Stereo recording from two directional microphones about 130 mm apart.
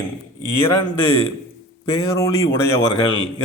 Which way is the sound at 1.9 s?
25° left (ahead or behind).